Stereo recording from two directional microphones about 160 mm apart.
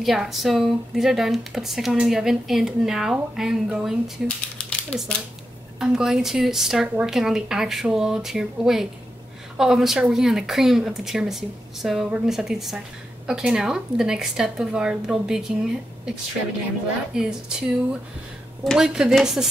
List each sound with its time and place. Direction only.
0.0 s speech: centre (ahead or behind)
4.6 s a sound: 5° left (ahead or behind)
5.8 s speech: 5° right (ahead or behind)
17.1 s speech: 5° right (ahead or behind)